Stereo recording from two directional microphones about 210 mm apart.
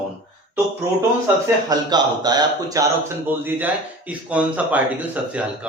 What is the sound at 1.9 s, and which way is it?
Speech, 20° right (ahead or behind).